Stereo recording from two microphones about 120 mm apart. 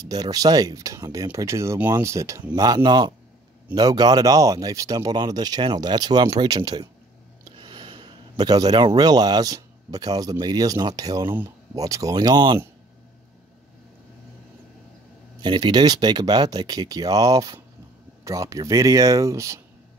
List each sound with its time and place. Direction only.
0.0 s speech: 30° right (ahead or behind)
7.4 s a sound: 40° right (ahead or behind)
10.4 s speech: 35° right (ahead or behind)
11.2 s speech: 20° right (ahead or behind); by 12.5 s 35° right (ahead or behind)
15.4 s speech: 40° right (ahead or behind)